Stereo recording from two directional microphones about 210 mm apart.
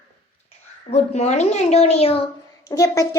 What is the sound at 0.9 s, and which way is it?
A woman's voice, 30° left (ahead or behind).